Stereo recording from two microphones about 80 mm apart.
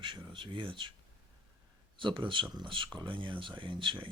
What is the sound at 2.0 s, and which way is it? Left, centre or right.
Speech, right.